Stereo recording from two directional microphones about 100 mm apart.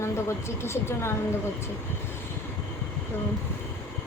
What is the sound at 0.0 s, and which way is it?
A woman's voice, 25° left (ahead or behind).